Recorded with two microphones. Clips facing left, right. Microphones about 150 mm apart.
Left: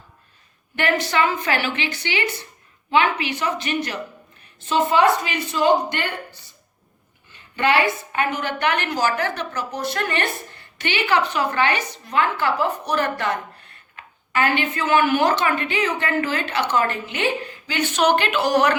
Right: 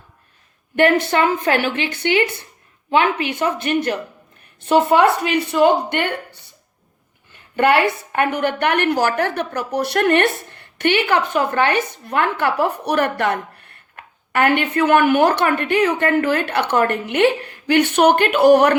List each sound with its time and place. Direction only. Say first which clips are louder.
0.8 s a woman's voice: right 5 dB; 55° right (ahead or behind)
7.5 s a woman's voice: right 4 dB; 55° right (ahead or behind)